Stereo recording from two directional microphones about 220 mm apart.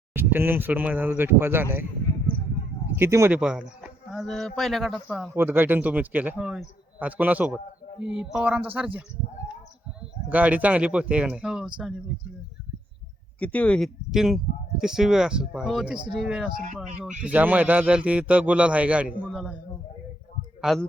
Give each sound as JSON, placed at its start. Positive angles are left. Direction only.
{"t": 0.1, "sound": "a man's voice", "side_deg": -10}
{"t": 2.9, "sound": "a man's voice", "side_deg": -10}
{"t": 10.2, "sound": "speech", "side_deg": -5}
{"t": 13.4, "sound": "speech", "side_deg": 5}
{"t": 16.5, "sound": "speech", "side_deg": -40}
{"t": 17.2, "sound": "a man's voice", "side_deg": -5}
{"t": 20.6, "sound": "speech", "side_deg": 0}